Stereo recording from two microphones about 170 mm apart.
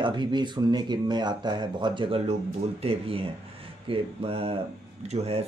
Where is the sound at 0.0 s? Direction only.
25° right (ahead or behind).